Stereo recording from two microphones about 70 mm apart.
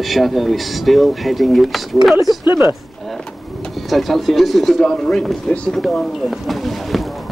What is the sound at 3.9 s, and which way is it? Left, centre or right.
Speech, centre.